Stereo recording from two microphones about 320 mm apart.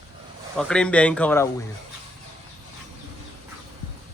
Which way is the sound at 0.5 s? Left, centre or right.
Centre.